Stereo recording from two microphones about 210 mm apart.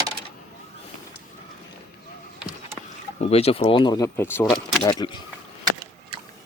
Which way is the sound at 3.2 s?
30° left (ahead or behind).